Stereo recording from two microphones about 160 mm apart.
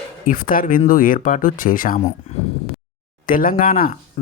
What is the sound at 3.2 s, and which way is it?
Speech, 60° left (ahead or behind).